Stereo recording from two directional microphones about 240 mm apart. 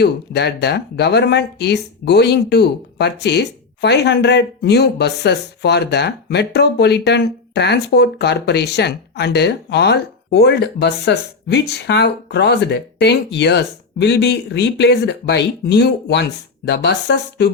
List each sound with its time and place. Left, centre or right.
0.0 s speech: left